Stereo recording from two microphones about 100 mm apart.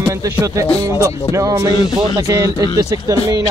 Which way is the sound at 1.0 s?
35° right (ahead or behind).